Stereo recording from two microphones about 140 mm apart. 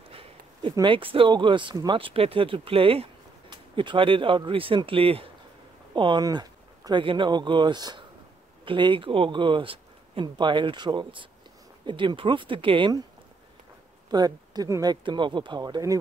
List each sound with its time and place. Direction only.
0.1 s a sound: 40° right (ahead or behind)
0.8 s speech: 40° right (ahead or behind)
14.1 s speech: 30° right (ahead or behind)